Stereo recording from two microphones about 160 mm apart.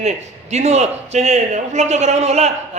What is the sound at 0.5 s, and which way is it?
A man's voice, 45° right (ahead or behind).